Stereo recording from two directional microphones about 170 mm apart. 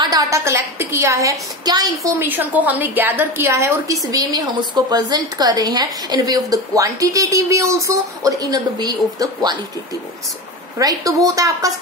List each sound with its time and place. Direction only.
0.0 s a woman's voice: 20° right (ahead or behind)
2.2 s a woman's voice: 10° right (ahead or behind)
10.8 s a woman's voice: 20° right (ahead or behind)